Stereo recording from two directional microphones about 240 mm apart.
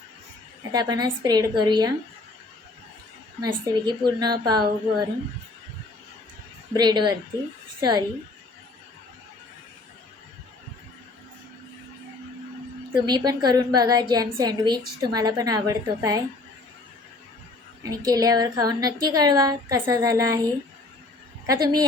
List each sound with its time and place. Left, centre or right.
0.7 s a woman's voice: centre
3.4 s a woman's voice: centre
6.7 s a woman's voice: centre
13.1 s a woman's voice: centre
17.8 s a woman's voice: centre
21.4 s a woman's voice: centre